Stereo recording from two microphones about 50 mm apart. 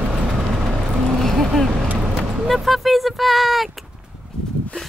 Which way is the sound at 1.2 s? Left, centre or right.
Centre.